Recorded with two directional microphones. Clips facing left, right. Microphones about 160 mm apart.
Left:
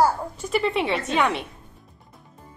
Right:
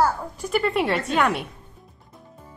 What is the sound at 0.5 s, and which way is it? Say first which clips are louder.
Speech: right 1 dB; centre (ahead or behind).